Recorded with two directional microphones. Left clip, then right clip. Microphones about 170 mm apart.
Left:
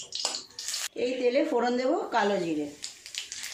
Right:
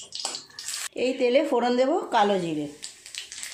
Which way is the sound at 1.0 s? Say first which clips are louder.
Right 4 dB; 45° right (ahead or behind).